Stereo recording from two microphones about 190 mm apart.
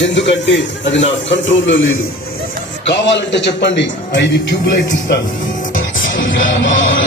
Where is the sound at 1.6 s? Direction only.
85° left.